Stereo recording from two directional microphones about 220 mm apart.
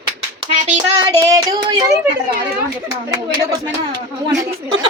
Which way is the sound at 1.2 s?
15° right (ahead or behind).